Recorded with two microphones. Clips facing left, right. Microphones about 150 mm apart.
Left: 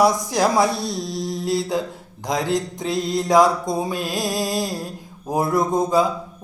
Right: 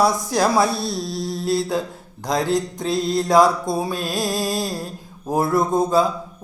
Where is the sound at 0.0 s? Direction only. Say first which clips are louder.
Left 1 dB; 20° left (ahead or behind).